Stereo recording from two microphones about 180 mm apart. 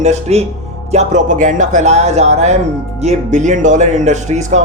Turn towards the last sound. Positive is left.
turn(degrees=-40)  # may be behind; listen again after turning